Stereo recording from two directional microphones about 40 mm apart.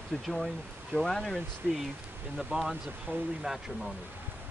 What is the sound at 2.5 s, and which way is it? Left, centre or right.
Speech, right.